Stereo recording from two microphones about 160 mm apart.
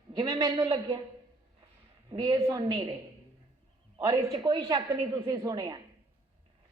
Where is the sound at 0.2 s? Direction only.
25° right (ahead or behind).